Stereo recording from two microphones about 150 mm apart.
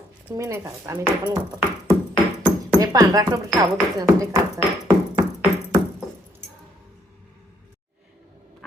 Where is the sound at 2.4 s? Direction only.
25° right (ahead or behind).